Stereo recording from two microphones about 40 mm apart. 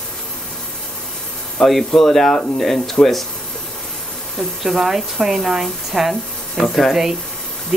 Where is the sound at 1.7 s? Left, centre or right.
Centre.